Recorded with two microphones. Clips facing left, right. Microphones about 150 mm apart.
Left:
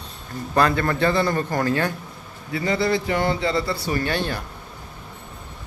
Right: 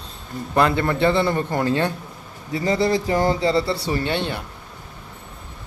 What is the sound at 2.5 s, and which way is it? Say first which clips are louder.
A man's voice: right 2 dB; 35° right (ahead or behind).